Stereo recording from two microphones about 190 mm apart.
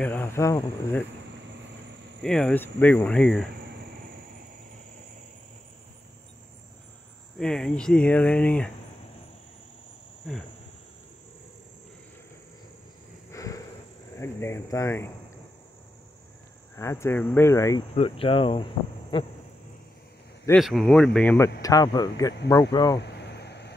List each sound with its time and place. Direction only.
0.0 s speech: 10° left (ahead or behind)
2.2 s speech: 5° left (ahead or behind)
7.3 s speech: 5° left (ahead or behind)
13.3 s a sound: 15° left (ahead or behind)
14.1 s speech: 15° left (ahead or behind)
16.7 s speech: 15° left (ahead or behind)
17.9 s speech: 30° left (ahead or behind)
20.5 s speech: centre (ahead or behind)
21.5 s speech: 20° left (ahead or behind)
22.9 s a sound: 60° left (ahead or behind)